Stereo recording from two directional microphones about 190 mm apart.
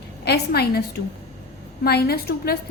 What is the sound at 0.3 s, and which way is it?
A woman's voice, 55° left (ahead or behind).